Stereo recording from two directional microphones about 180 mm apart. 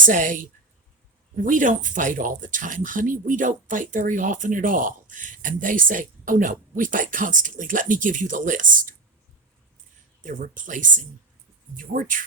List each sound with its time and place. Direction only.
0.0 s speech: 50° right (ahead or behind)
10.2 s speech: 45° right (ahead or behind)